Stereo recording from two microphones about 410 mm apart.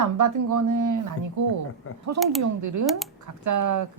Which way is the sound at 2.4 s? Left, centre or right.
Right.